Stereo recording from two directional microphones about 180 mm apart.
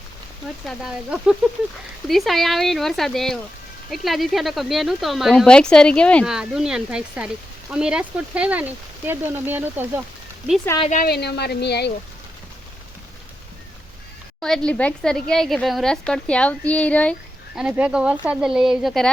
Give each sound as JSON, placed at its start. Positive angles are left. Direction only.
{"t": 0.7, "sound": "speech", "side_deg": -5}
{"t": 10.8, "sound": "speech", "side_deg": 50}
{"t": 14.4, "sound": "speech", "side_deg": 5}
{"t": 17.5, "sound": "speech", "side_deg": -5}